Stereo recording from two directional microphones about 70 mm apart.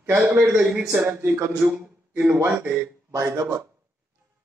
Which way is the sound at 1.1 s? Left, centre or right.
Right.